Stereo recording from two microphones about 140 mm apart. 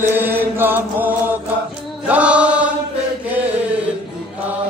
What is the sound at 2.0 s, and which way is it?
Chant, 10° right (ahead or behind).